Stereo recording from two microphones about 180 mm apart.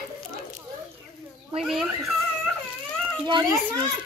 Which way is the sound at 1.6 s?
Centre (ahead or behind).